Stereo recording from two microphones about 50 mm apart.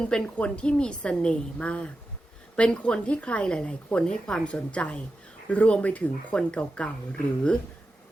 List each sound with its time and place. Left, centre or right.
0.0 s speech: centre
4.7 s speech: left